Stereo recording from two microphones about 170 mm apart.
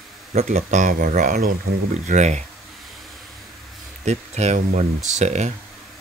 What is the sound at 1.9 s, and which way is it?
Speech, 45° right (ahead or behind).